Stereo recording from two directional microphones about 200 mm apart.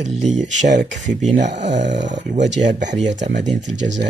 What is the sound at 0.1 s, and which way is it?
Speech, 35° right (ahead or behind).